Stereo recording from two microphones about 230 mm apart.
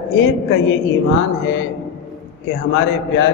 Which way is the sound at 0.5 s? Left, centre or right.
Left.